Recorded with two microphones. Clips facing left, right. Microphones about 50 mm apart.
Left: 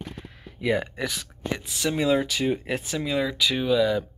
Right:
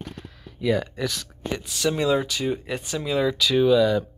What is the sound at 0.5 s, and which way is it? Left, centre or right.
Speech, left.